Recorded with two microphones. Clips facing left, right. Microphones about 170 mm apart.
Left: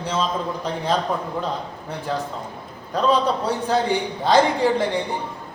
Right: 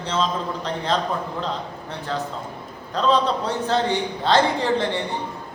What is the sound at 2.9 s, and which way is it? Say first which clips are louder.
A man's voice: left 1 dB; 10° left (ahead or behind).